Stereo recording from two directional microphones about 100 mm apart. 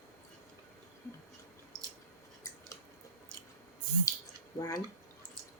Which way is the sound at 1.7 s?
35° right (ahead or behind).